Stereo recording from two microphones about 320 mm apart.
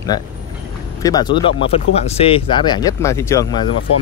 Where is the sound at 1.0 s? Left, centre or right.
Centre.